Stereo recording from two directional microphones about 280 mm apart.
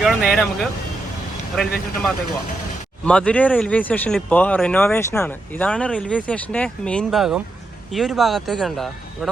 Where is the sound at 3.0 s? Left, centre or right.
Centre.